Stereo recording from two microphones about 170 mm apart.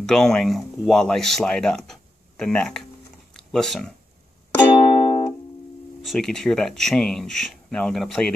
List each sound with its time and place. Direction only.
0.0 s speech: 5° left (ahead or behind)
4.7 s music: 20° left (ahead or behind)
6.0 s speech: 5° left (ahead or behind)